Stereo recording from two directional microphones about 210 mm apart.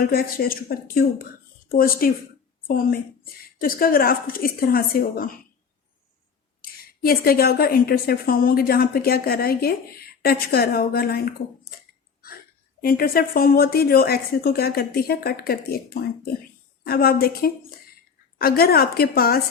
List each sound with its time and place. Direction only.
0.0 s speech: 45° left (ahead or behind)
6.6 s speech: 45° left (ahead or behind)
12.8 s speech: 45° left (ahead or behind)